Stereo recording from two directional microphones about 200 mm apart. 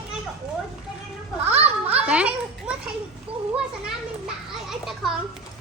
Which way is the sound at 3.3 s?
30° right (ahead or behind).